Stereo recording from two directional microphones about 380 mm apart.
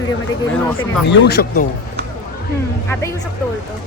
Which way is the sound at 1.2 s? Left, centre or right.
Left.